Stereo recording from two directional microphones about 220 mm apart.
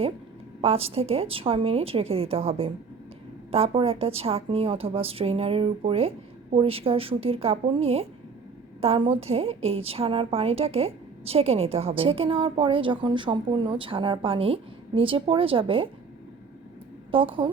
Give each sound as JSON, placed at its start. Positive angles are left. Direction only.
{"t": 0.6, "sound": "a woman's voice", "side_deg": -25}
{"t": 17.1, "sound": "a woman's voice", "side_deg": -25}